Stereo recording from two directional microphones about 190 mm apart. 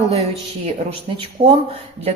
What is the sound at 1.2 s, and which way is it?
Speech, 30° right (ahead or behind).